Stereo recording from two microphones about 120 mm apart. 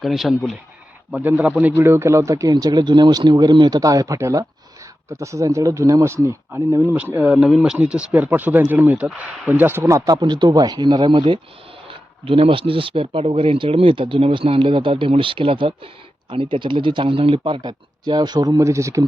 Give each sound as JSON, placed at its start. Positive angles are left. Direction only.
{"t": 0.0, "sound": "speech", "side_deg": 0}
{"t": 1.1, "sound": "speech", "side_deg": -15}
{"t": 1.7, "sound": "speech", "side_deg": -20}